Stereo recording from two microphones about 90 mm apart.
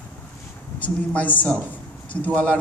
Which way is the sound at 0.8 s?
15° left (ahead or behind).